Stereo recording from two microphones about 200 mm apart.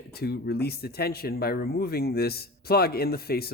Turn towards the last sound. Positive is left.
turn(degrees=50)  # may be behind; listen again after turning